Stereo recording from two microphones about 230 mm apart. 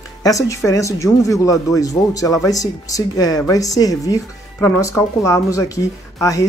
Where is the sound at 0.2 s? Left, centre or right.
Centre.